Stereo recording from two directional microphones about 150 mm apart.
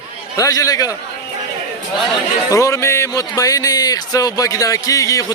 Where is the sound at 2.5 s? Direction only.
20° left (ahead or behind).